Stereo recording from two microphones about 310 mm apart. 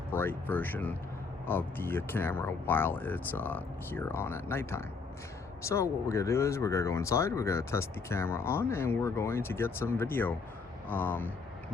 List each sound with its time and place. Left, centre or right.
0.1 s speech: centre